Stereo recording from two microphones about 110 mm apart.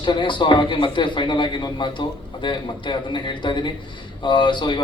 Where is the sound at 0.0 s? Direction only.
45° left (ahead or behind).